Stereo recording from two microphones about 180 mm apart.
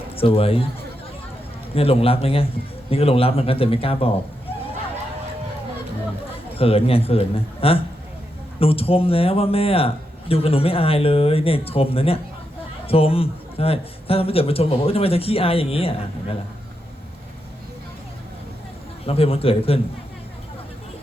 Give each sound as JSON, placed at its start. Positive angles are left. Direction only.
{"t": 0.2, "sound": "a man's voice", "side_deg": 30}
{"t": 1.7, "sound": "a man's voice", "side_deg": 35}
{"t": 6.6, "sound": "a man's voice", "side_deg": 30}
{"t": 19.0, "sound": "a man's voice", "side_deg": 35}